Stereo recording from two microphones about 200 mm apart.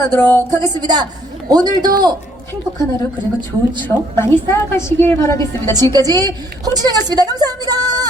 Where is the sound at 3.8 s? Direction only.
10° left (ahead or behind).